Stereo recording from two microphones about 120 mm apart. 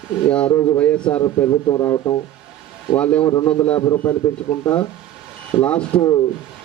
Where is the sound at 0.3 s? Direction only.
10° left (ahead or behind).